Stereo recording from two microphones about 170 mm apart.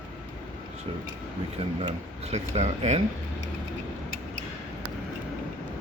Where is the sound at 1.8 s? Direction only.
35° right (ahead or behind).